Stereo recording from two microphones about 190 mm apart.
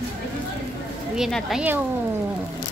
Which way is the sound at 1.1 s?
Centre (ahead or behind).